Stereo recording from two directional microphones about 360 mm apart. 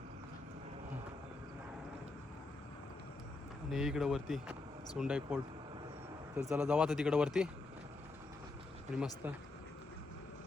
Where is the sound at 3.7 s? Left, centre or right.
Centre.